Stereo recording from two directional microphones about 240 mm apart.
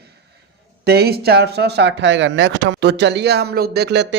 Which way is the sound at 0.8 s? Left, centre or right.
Right.